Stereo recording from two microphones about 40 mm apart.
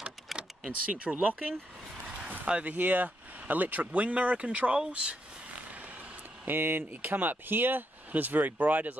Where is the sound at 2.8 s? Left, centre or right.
Right.